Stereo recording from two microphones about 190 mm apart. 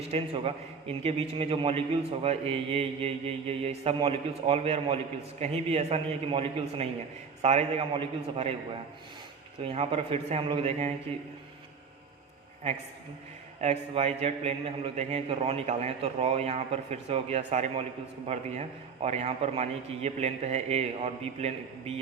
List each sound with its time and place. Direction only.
0.1 s a man's voice: 30° right (ahead or behind)
9.7 s a man's voice: 30° right (ahead or behind)
13.6 s a man's voice: 35° right (ahead or behind)